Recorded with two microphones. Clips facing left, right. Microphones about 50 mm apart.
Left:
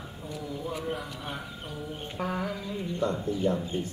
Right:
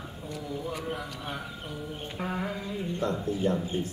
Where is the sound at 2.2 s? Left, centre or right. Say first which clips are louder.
Left 1 dB; right.